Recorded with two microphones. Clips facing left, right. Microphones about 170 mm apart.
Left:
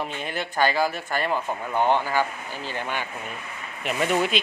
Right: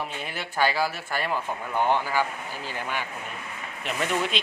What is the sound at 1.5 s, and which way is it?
Speech, 15° left (ahead or behind).